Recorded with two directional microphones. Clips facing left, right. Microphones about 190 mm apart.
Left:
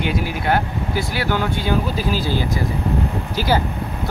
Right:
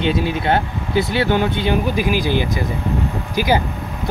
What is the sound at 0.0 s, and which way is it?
Speech, 25° right (ahead or behind).